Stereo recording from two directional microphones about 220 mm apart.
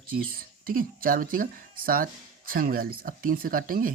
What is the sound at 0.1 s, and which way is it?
Speech, 40° right (ahead or behind).